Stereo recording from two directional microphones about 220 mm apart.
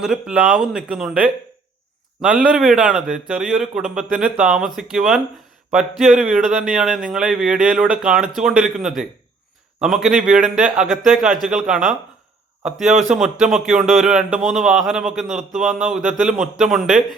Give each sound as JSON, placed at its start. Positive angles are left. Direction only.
{"t": 0.0, "sound": "a man's voice", "side_deg": -5}
{"t": 13.1, "sound": "a man's voice", "side_deg": 0}